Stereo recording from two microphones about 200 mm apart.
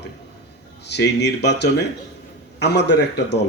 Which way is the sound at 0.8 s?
55° left (ahead or behind).